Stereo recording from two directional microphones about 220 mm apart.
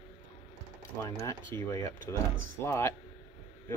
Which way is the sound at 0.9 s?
10° left (ahead or behind).